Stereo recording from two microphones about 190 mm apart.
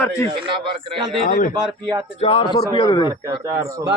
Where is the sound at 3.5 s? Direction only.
15° right (ahead or behind).